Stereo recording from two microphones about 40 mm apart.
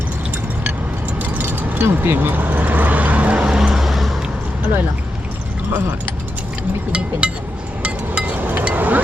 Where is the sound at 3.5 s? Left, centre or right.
Centre.